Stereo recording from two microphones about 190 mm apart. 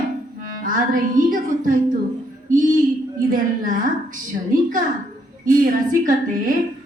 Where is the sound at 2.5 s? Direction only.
45° right (ahead or behind).